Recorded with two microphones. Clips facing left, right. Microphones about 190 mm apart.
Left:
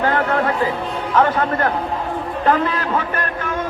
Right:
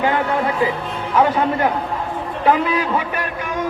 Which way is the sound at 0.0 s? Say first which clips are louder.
Even; 15° right (ahead or behind).